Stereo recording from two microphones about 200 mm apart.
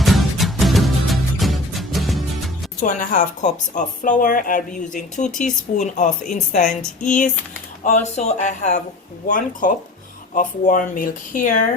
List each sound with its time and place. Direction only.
0.0 s music: centre (ahead or behind)
2.8 s speech: 40° left (ahead or behind)